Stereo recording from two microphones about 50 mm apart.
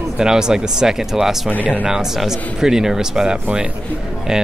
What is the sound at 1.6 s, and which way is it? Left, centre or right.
Speech, right.